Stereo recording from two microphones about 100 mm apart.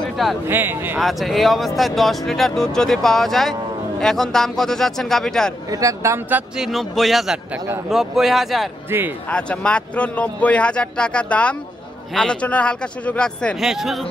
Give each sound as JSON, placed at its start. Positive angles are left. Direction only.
{"t": 0.5, "sound": "speech", "side_deg": -20}
{"t": 0.9, "sound": "speech", "side_deg": 0}
{"t": 5.7, "sound": "speech", "side_deg": -35}
{"t": 6.5, "sound": "speech", "side_deg": 0}
{"t": 8.9, "sound": "speech", "side_deg": -25}
{"t": 9.3, "sound": "speech", "side_deg": 10}
{"t": 13.6, "sound": "speech", "side_deg": 0}